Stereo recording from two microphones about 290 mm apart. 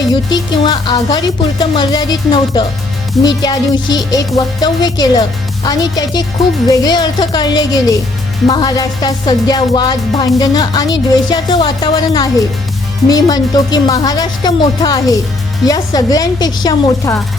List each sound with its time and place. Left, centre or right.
0.1 s speech: centre